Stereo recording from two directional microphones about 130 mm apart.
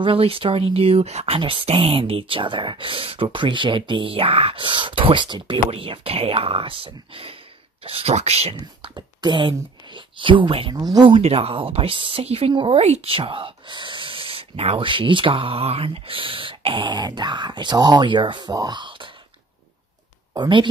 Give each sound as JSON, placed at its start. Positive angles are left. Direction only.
{"t": 0.0, "sound": "speech", "side_deg": -45}
{"t": 8.9, "sound": "speech", "side_deg": -35}
{"t": 10.8, "sound": "speech", "side_deg": -30}
{"t": 20.3, "sound": "speech", "side_deg": -35}